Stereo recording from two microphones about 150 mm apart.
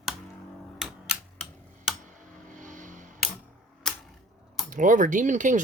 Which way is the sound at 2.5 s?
60° right (ahead or behind).